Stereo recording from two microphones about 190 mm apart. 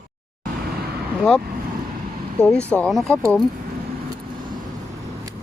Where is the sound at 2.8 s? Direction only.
5° left (ahead or behind).